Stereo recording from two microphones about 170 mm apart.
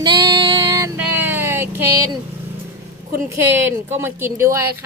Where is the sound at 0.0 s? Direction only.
25° right (ahead or behind).